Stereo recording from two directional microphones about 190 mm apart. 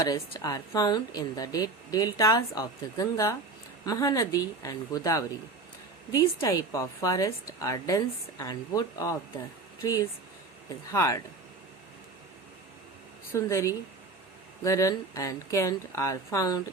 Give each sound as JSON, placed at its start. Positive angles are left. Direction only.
{"t": 0.0, "sound": "a woman's voice", "side_deg": 20}
{"t": 13.3, "sound": "a woman's voice", "side_deg": 15}